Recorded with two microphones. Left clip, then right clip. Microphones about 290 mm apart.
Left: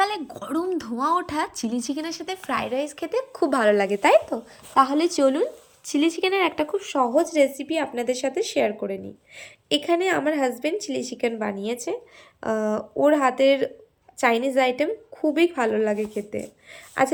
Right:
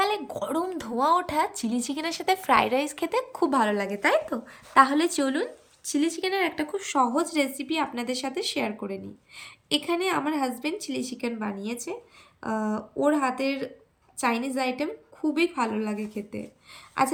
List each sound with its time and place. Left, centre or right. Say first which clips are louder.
0.0 s a woman's voice: left 2 dB; centre
17.0 s a woman's voice: left 3 dB; centre